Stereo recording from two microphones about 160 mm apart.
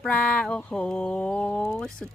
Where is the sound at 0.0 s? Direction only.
5° left (ahead or behind).